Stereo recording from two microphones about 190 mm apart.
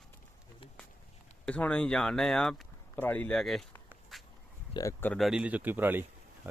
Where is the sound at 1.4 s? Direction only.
5° left (ahead or behind).